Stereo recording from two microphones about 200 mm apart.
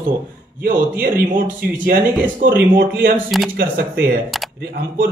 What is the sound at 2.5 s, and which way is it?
Speech, 55° right (ahead or behind).